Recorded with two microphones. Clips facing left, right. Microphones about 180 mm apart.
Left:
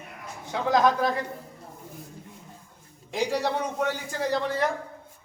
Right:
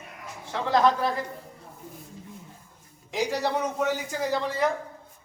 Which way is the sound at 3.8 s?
5° right (ahead or behind).